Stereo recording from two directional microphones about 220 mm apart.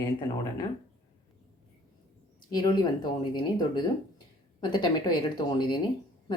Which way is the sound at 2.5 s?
20° left (ahead or behind).